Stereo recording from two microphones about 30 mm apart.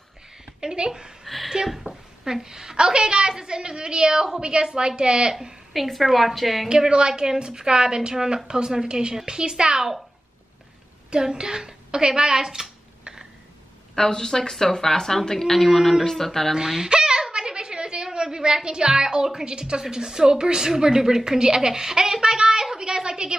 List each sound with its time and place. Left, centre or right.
0.6 s a woman's voice: right
1.2 s a woman's voice: centre
2.2 s a woman's voice: right
5.7 s a woman's voice: centre
6.7 s a woman's voice: right
11.1 s a woman's voice: right
13.9 s a woman's voice: left
15.6 s speech: centre
16.3 s speech: centre
16.5 s speech: centre
17.3 s a sound: right
18.1 s a woman's voice: right